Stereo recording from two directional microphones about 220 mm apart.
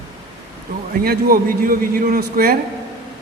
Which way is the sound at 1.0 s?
40° right (ahead or behind).